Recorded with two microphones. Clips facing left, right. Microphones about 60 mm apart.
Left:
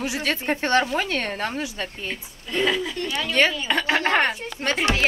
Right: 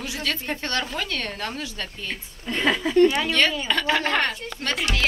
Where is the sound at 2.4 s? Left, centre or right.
Right.